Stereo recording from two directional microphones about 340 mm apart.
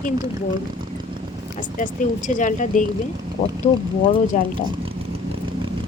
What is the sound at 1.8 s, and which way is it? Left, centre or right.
Speech, left.